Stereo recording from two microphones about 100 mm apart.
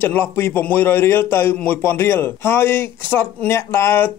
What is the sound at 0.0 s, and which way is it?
Speech, 20° left (ahead or behind).